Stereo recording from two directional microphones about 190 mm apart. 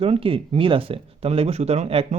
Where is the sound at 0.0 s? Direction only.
30° right (ahead or behind).